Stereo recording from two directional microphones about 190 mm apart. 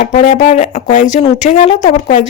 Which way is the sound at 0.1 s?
40° left (ahead or behind).